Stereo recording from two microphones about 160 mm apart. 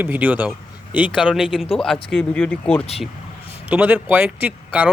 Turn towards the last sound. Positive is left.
turn(degrees=-10)  # may be behind; listen again after turning